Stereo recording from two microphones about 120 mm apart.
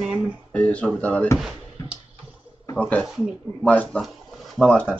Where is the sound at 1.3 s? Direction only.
5° right (ahead or behind).